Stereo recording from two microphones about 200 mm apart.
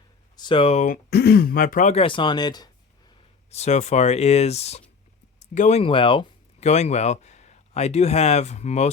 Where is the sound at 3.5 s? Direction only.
35° left (ahead or behind).